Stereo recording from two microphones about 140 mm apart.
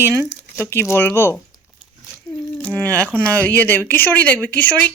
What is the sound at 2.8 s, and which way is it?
Speech, 10° left (ahead or behind).